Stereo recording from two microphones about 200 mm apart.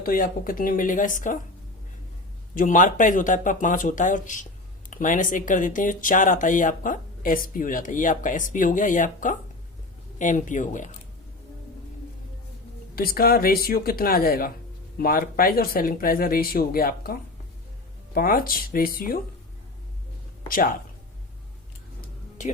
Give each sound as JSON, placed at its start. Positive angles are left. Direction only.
{"t": 0.0, "sound": "speech", "side_deg": 45}
{"t": 2.6, "sound": "speech", "side_deg": 40}
{"t": 13.0, "sound": "speech", "side_deg": 50}